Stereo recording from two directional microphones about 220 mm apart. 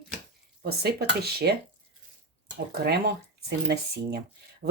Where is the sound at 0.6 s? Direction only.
45° right (ahead or behind).